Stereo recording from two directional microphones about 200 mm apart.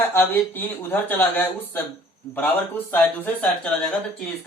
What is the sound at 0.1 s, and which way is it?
Speech, 10° left (ahead or behind).